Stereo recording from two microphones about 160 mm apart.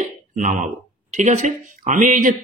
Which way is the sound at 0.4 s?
50° right (ahead or behind).